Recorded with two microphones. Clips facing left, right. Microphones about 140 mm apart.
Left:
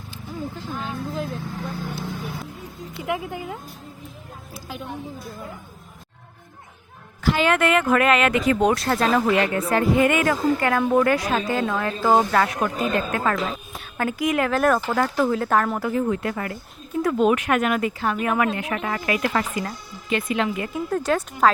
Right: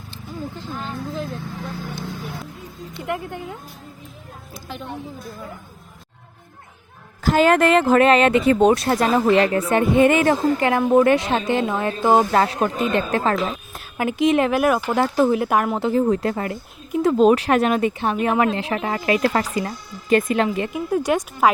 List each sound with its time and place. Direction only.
0.7 s speech: centre (ahead or behind)
7.2 s speech: 40° right (ahead or behind)
13.9 s speech: 20° right (ahead or behind)
14.6 s speech: 10° right (ahead or behind)
14.9 s speech: 25° right (ahead or behind)
15.9 s speech: 35° right (ahead or behind)
20.1 s a woman's voice: 45° right (ahead or behind)
20.7 s speech: 15° right (ahead or behind)